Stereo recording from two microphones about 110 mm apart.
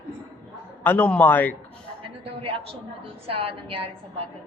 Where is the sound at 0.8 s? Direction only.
15° left (ahead or behind).